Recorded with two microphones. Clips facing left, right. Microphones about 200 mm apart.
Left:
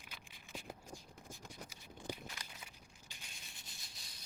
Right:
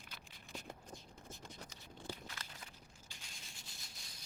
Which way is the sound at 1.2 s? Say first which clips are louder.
Left 1 dB; 10° left (ahead or behind).